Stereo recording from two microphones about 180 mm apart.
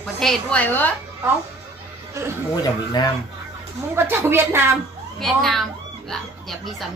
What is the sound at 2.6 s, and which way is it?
Speech, 20° left (ahead or behind).